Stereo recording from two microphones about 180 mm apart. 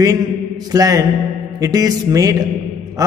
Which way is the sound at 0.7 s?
20° right (ahead or behind).